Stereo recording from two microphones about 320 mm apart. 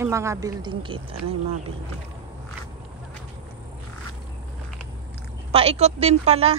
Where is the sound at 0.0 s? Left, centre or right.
Centre.